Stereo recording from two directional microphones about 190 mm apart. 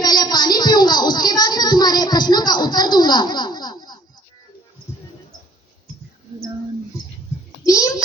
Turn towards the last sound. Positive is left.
turn(degrees=20)  # may be behind; listen again after turning